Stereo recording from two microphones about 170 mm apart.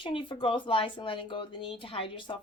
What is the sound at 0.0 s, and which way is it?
A woman's voice, 30° left (ahead or behind).